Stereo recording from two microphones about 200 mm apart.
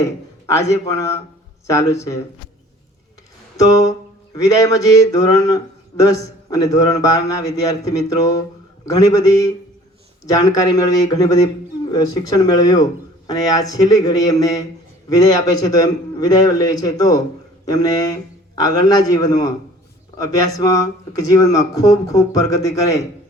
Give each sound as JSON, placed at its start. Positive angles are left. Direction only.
{"t": 0.4, "sound": "a man's voice", "side_deg": 15}
{"t": 3.7, "sound": "a man's voice", "side_deg": 15}
{"t": 10.5, "sound": "a man's voice", "side_deg": 15}